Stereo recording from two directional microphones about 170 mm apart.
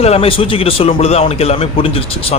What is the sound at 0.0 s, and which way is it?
A man's voice, 35° left (ahead or behind).